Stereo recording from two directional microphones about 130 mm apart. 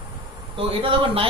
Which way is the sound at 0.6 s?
45° right (ahead or behind).